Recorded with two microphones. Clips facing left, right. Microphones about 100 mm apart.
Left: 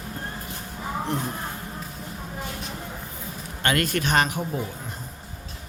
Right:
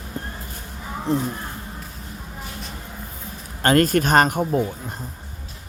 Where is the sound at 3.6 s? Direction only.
40° right (ahead or behind).